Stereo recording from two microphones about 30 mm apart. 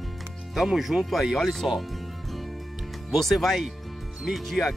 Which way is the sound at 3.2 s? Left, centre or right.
Centre.